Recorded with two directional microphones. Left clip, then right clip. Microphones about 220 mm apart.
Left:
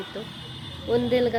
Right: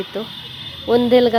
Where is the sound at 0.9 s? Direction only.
25° right (ahead or behind).